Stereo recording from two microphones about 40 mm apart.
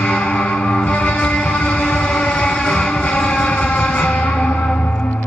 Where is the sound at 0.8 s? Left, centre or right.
Left.